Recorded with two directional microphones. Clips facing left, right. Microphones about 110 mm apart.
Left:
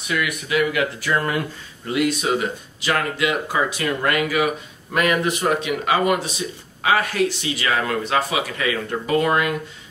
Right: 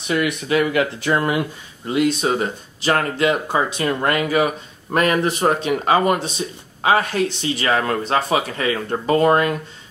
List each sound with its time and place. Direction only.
0.1 s speech: 35° right (ahead or behind)